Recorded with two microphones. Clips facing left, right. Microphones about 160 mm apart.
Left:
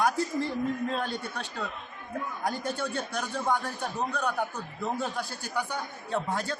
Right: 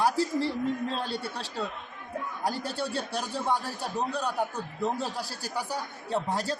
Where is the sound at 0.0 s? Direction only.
30° right (ahead or behind).